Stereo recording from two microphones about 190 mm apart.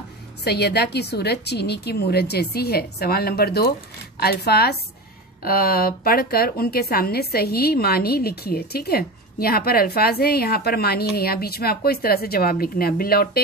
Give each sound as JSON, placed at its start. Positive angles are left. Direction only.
{"t": 0.4, "sound": "a woman's voice", "side_deg": 60}